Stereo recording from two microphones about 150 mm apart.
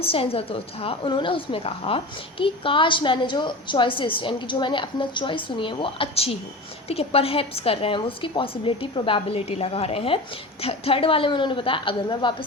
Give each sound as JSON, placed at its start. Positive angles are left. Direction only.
{"t": 0.0, "sound": "a woman's voice", "side_deg": 40}